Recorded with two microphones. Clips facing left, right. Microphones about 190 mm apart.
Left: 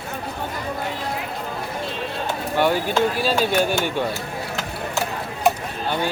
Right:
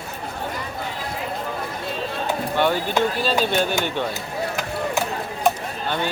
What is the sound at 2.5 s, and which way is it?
A man's voice, 10° left (ahead or behind).